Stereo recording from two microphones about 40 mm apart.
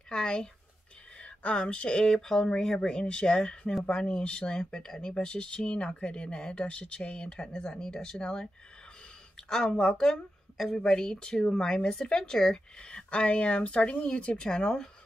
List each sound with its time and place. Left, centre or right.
0.1 s a sound: left
1.2 s speech: left
9.5 s speech: left
11.7 s speech: left